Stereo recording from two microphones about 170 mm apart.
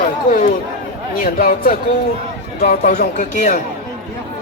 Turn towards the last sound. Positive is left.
turn(degrees=55)  # may be behind; listen again after turning